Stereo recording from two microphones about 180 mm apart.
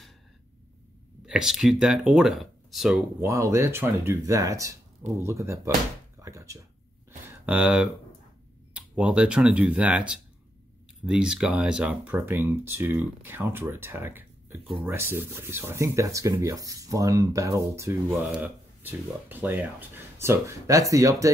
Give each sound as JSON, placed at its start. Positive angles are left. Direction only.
{"t": 1.2, "sound": "speech", "side_deg": -5}
{"t": 3.2, "sound": "speech", "side_deg": -15}
{"t": 7.1, "sound": "a sound", "side_deg": -10}
{"t": 8.7, "sound": "speech", "side_deg": -5}